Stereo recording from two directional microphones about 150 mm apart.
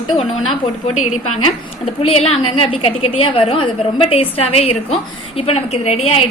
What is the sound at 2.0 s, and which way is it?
A woman's voice, 40° left (ahead or behind).